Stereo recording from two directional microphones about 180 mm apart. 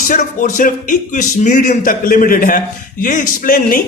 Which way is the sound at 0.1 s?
45° left (ahead or behind).